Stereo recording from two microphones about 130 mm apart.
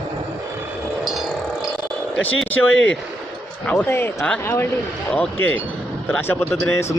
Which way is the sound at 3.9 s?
20° left (ahead or behind).